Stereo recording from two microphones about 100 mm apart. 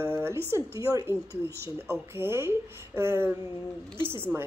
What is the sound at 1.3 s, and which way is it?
Speech, 25° left (ahead or behind).